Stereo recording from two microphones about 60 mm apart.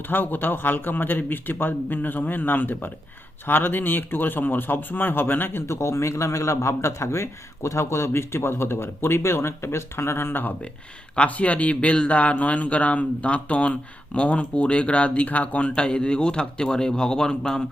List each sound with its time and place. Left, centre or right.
0.1 s a man's voice: left
5.6 s a man's voice: left
11.1 s a man's voice: left